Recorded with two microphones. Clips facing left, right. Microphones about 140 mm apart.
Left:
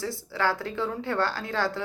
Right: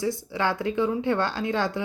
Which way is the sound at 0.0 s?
15° right (ahead or behind).